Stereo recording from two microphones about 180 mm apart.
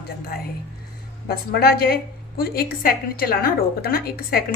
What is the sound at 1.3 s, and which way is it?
A woman's voice, 60° left (ahead or behind).